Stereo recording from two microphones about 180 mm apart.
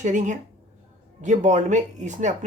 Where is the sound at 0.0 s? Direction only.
40° right (ahead or behind).